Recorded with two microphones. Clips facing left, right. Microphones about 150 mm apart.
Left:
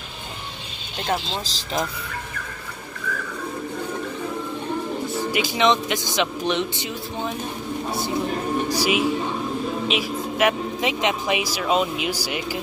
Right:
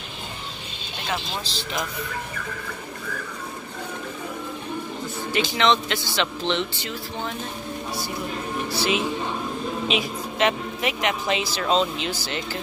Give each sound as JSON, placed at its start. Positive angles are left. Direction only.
{"t": 1.3, "sound": "speech", "side_deg": 30}
{"t": 5.3, "sound": "speech", "side_deg": 15}
{"t": 8.7, "sound": "speech", "side_deg": 10}